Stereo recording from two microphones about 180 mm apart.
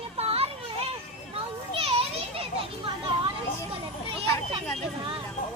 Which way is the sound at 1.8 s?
30° right (ahead or behind).